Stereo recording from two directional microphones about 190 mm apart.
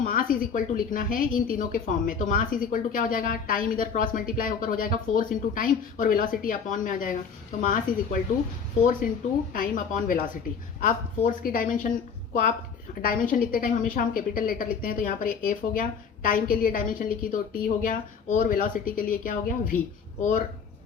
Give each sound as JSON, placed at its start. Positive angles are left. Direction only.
{"t": 0.0, "sound": "a woman's voice", "side_deg": 45}